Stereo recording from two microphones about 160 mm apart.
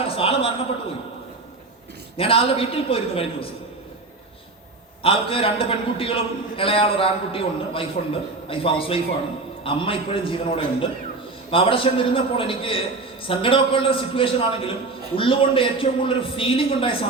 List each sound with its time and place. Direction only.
0.2 s a sound: 35° left (ahead or behind)
2.1 s a man's voice: 35° left (ahead or behind)
5.0 s a man's voice: 35° left (ahead or behind)